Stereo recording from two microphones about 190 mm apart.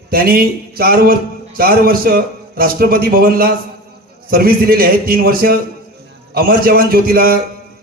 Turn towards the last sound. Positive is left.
turn(degrees=-50)  # may be behind; listen again after turning